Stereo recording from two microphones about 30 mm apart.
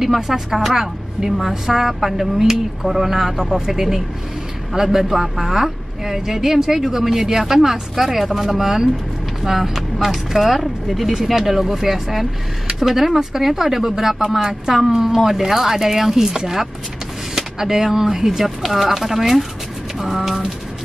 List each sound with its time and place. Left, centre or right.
0.0 s speech: centre
4.7 s speech: centre
17.4 s speech: centre